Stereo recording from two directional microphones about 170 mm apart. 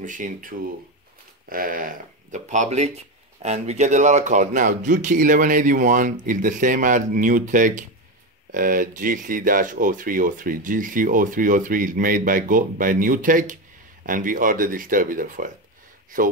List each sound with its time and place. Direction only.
0.0 s speech: 50° right (ahead or behind)